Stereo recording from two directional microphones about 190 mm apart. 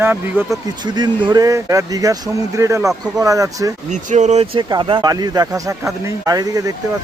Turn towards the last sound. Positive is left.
turn(degrees=-20)  # may be behind; listen again after turning